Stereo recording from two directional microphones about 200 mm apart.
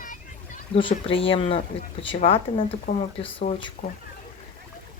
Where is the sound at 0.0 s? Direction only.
40° left (ahead or behind).